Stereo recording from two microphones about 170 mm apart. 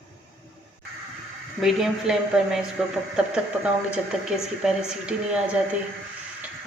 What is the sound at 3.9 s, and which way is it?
Speech, 5° right (ahead or behind).